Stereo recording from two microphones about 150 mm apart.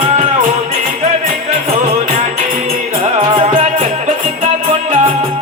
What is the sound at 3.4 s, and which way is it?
Music, 40° right (ahead or behind).